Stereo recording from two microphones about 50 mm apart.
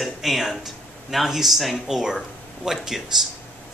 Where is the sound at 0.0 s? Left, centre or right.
Centre.